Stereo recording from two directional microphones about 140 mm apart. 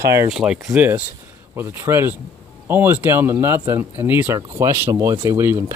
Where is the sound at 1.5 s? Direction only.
15° right (ahead or behind).